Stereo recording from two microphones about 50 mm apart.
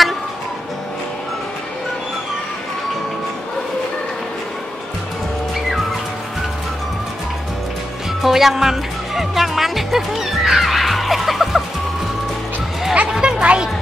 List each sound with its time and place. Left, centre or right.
8.2 s music: centre
13.1 s music: centre